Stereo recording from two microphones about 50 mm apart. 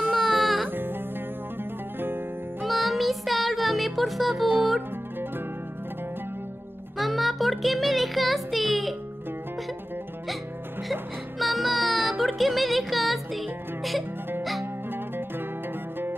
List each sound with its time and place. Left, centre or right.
0.1 s music: centre
0.7 s music: right
2.6 s music: centre
7.0 s music: centre
10.9 s music: centre
14.6 s music: right